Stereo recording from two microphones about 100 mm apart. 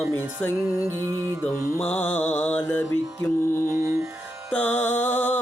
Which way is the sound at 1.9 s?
20° left (ahead or behind).